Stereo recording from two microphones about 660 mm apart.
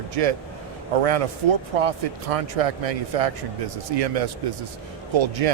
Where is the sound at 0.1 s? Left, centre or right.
Right.